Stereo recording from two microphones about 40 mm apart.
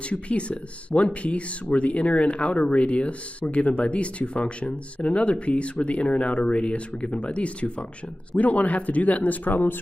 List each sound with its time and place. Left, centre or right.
0.1 s speech: left
8.3 s speech: left